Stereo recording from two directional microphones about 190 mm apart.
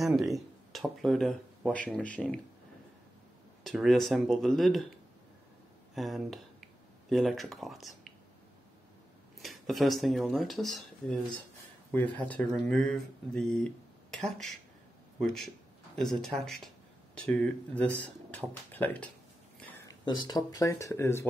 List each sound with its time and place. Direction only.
0.3 s speech: centre (ahead or behind)
3.6 s speech: centre (ahead or behind)
5.9 s speech: centre (ahead or behind)
9.4 s speech: centre (ahead or behind)
19.9 s speech: 20° left (ahead or behind)